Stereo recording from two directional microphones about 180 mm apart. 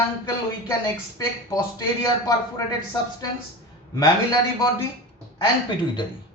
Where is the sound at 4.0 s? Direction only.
20° left (ahead or behind).